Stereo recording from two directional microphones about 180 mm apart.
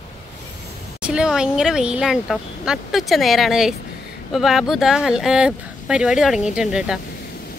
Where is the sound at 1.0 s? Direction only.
5° right (ahead or behind).